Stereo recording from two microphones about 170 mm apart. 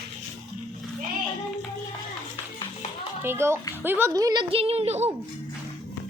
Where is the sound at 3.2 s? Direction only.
15° right (ahead or behind); by 5.0 s 40° right (ahead or behind).